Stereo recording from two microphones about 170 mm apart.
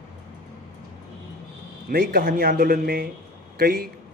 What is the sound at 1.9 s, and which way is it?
A man's voice, 60° right (ahead or behind).